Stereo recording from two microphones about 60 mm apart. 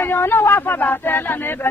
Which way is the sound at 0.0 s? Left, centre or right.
Left.